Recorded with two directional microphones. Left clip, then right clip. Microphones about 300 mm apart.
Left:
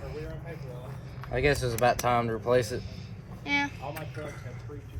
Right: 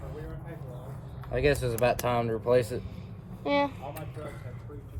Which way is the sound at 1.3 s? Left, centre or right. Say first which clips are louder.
Even; centre.